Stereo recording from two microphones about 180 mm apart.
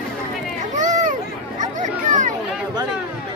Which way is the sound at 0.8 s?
45° right (ahead or behind).